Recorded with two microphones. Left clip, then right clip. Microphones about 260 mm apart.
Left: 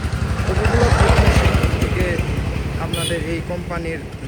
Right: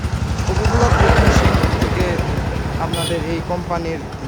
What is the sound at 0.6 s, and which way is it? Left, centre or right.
Vehicle, right.